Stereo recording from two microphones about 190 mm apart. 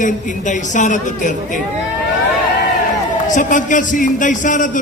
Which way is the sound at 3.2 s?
40° left (ahead or behind).